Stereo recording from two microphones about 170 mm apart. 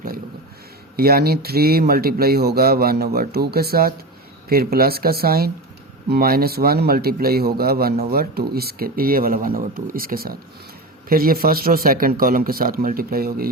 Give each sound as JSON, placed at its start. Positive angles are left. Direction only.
{"t": 0.9, "sound": "speech", "side_deg": -65}